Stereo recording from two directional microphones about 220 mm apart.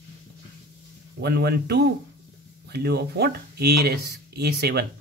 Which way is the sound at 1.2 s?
45° right (ahead or behind).